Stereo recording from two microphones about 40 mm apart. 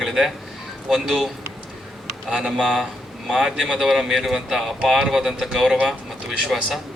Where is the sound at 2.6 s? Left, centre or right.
Centre.